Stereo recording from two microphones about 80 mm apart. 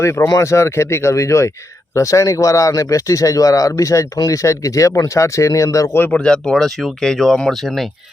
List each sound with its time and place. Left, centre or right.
0.0 s speech: left
6.1 s speech: centre